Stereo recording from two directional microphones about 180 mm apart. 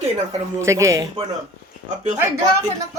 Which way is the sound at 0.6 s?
15° right (ahead or behind).